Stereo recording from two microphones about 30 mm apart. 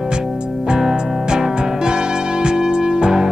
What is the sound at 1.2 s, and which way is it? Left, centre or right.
Music, right.